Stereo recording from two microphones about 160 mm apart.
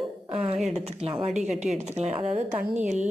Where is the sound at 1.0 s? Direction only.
45° right (ahead or behind).